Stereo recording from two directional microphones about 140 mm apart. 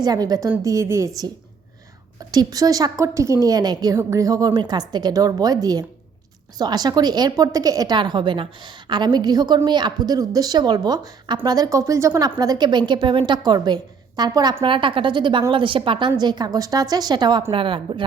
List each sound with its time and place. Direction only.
0.0 s a woman's voice: 30° right (ahead or behind)